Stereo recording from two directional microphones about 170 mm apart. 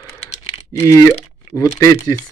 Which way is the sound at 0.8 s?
20° left (ahead or behind).